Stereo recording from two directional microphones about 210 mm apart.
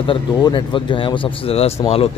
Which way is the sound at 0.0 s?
25° left (ahead or behind).